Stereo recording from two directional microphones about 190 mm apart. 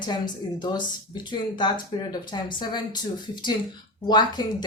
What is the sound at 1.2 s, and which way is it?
A woman's voice, 25° left (ahead or behind).